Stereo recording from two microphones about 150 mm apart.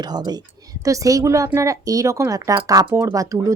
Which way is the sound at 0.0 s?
25° right (ahead or behind).